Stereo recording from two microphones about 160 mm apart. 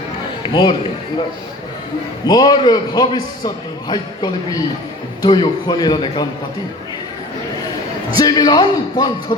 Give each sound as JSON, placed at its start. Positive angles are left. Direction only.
{"t": 0.4, "sound": "speech", "side_deg": 30}
{"t": 2.2, "sound": "a man's voice", "side_deg": 25}
{"t": 8.2, "sound": "a man's voice", "side_deg": 25}